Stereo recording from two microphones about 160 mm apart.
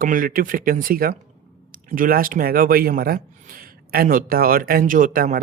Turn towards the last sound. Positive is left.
turn(degrees=-60)  # may be behind; listen again after turning